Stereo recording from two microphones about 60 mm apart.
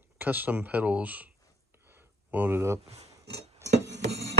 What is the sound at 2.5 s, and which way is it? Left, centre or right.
Speech, right.